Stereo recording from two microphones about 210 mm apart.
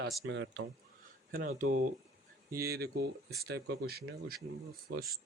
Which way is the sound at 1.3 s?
40° right (ahead or behind).